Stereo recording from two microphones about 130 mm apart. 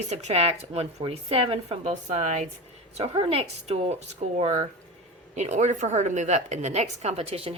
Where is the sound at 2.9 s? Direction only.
50° right (ahead or behind).